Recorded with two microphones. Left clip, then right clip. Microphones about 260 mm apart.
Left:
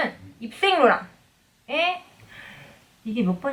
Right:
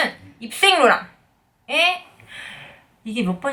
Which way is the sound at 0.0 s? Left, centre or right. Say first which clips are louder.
Right 4 dB; centre.